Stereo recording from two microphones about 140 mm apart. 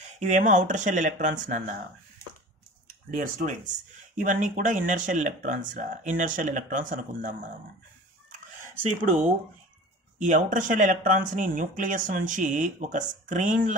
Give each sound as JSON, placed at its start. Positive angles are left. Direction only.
{"t": 0.3, "sound": "speech", "side_deg": -65}
{"t": 3.2, "sound": "speech", "side_deg": -70}
{"t": 10.1, "sound": "speech", "side_deg": -65}